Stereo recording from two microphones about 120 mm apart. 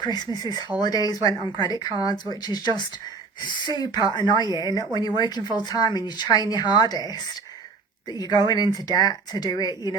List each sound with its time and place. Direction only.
0.0 s speech: 35° left (ahead or behind)